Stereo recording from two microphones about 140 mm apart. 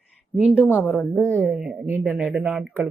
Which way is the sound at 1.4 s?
5° right (ahead or behind).